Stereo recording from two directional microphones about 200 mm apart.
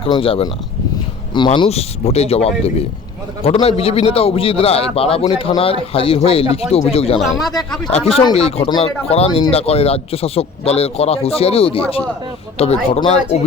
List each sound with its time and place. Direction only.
0.0 s speech: 25° left (ahead or behind)
7.2 s speech: centre (ahead or behind)
7.9 s speech: 30° left (ahead or behind)
12.9 s speech: 30° left (ahead or behind)